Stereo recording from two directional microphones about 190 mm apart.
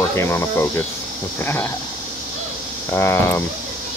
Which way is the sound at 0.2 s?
15° left (ahead or behind).